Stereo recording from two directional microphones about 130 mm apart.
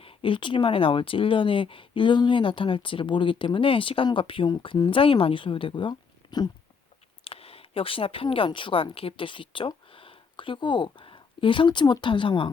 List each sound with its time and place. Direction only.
0.0 s speech: 40° left (ahead or behind)
7.3 s speech: 50° left (ahead or behind)